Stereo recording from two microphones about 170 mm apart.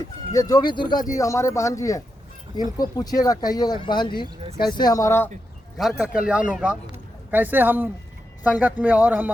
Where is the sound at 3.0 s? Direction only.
20° left (ahead or behind).